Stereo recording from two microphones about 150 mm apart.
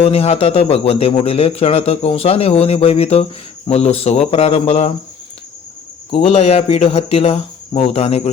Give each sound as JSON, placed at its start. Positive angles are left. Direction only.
{"t": 0.0, "sound": "speech", "side_deg": 40}
{"t": 6.1, "sound": "speech", "side_deg": 40}